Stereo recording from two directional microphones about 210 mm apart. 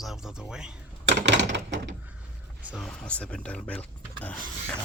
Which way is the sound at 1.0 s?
55° right (ahead or behind).